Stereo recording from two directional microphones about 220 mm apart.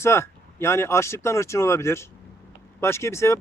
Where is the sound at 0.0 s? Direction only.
10° left (ahead or behind).